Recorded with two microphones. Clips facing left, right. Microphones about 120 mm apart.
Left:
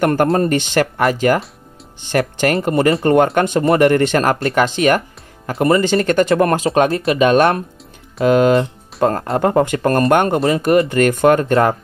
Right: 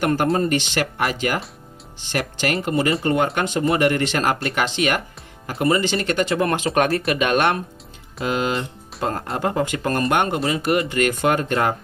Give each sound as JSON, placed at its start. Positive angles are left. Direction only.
{"t": 0.0, "sound": "speech", "side_deg": 50}
{"t": 6.5, "sound": "speech", "side_deg": 30}
{"t": 8.3, "sound": "speech", "side_deg": 50}